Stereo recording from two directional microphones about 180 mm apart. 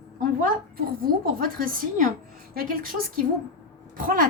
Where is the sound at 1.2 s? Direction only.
55° right (ahead or behind).